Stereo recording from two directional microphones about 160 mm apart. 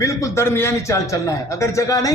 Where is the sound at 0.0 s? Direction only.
20° left (ahead or behind).